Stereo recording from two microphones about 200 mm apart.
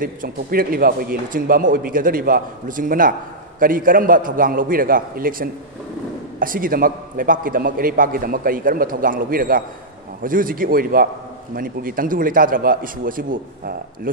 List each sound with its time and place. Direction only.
0.0 s speech: 45° right (ahead or behind)